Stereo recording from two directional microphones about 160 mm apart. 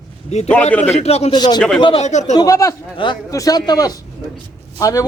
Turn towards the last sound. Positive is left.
turn(degrees=20)  # may be behind; listen again after turning